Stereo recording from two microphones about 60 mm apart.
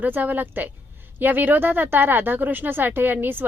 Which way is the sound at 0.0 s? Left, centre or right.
Right.